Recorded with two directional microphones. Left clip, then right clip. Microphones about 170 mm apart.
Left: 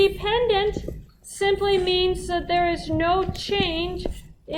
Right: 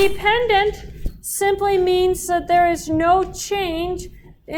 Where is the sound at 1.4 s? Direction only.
40° right (ahead or behind).